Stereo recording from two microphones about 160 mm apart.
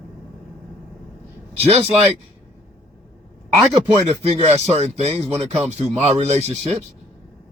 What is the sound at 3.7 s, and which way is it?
Speech, 30° right (ahead or behind).